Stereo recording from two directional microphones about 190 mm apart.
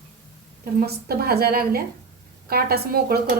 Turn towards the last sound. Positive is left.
turn(degrees=-55)  # may be behind; listen again after turning